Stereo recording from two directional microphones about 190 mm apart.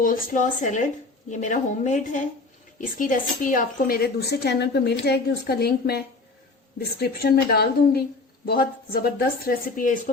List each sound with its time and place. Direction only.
0.0 s a woman's voice: 45° left (ahead or behind)